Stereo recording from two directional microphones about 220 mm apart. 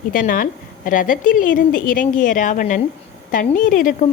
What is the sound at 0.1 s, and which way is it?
A woman's voice, 40° left (ahead or behind).